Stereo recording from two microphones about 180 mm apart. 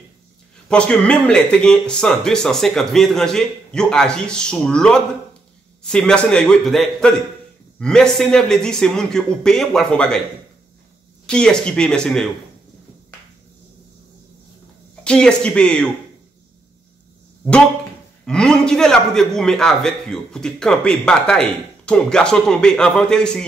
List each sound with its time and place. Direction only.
0.7 s a man's voice: 5° left (ahead or behind)
11.2 s a man's voice: 5° left (ahead or behind)
15.0 s a man's voice: 5° left (ahead or behind)
18.2 s a man's voice: 5° left (ahead or behind)